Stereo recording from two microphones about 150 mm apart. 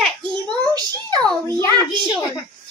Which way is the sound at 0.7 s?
25° right (ahead or behind).